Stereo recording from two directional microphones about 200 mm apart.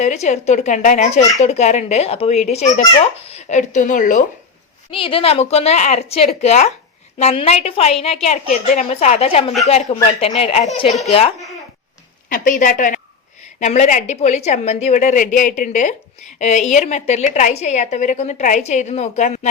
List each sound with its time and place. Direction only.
0.0 s a woman's voice: 35° left (ahead or behind)
4.9 s a woman's voice: 25° left (ahead or behind)
12.3 s a woman's voice: 40° left (ahead or behind)